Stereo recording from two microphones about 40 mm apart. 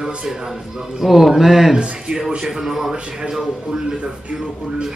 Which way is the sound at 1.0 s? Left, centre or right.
Centre.